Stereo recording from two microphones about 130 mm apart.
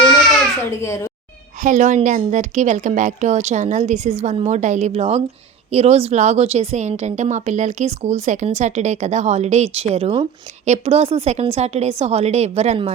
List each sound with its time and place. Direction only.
0.7 s a child's voice: 20° left (ahead or behind)
1.6 s a woman's voice: 70° right (ahead or behind); by 12.9 s 50° right (ahead or behind)